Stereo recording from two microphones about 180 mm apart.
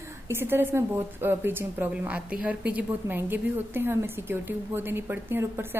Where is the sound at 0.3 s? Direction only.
10° right (ahead or behind).